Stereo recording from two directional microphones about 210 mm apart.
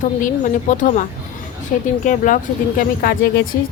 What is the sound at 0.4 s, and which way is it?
Speech, 40° left (ahead or behind).